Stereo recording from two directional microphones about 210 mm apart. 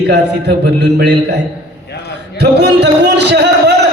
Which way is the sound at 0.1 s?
55° right (ahead or behind).